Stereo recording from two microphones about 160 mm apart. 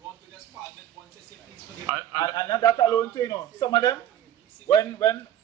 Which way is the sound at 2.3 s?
25° left (ahead or behind).